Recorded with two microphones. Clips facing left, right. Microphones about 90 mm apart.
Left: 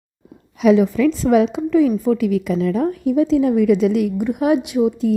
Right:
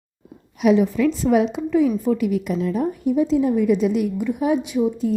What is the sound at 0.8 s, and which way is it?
A woman's voice, 90° left.